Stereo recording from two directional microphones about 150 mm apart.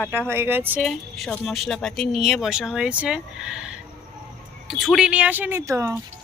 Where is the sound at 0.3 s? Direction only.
15° right (ahead or behind).